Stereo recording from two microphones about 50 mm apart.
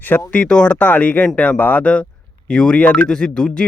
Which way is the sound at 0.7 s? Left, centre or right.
Left.